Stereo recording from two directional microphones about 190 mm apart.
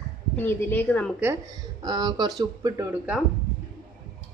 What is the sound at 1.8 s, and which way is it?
Speech, 20° right (ahead or behind).